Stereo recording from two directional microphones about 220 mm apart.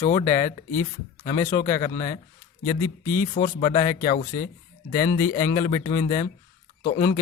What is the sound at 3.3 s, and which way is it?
Speech, 35° left (ahead or behind).